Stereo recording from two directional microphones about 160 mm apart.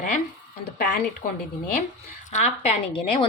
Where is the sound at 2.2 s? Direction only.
45° left (ahead or behind).